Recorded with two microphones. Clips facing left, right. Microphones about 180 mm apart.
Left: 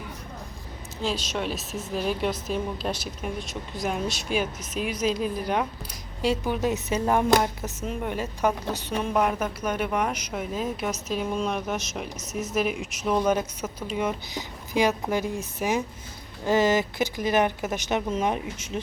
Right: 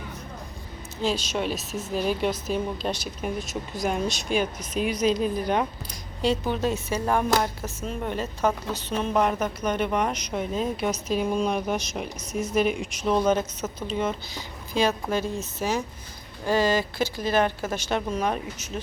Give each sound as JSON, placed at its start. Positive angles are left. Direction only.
{"t": 1.0, "sound": "a woman's voice", "side_deg": 0}